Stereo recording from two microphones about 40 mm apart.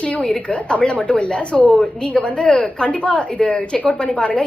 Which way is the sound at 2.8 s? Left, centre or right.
Left.